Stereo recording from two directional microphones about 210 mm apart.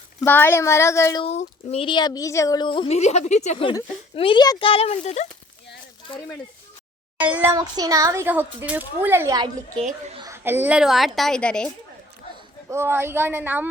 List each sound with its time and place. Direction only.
0.2 s a woman's voice: 10° left (ahead or behind)
1.2 s speech: 30° left (ahead or behind)
7.2 s a child's voice: 10° right (ahead or behind)
12.6 s a child's voice: 10° right (ahead or behind)